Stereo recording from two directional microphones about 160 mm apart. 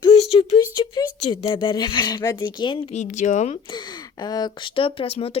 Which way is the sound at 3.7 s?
25° left (ahead or behind).